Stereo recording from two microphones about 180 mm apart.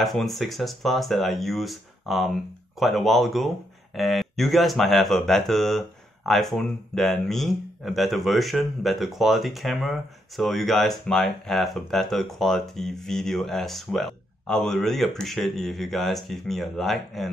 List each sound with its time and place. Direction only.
0.0 s speech: centre (ahead or behind)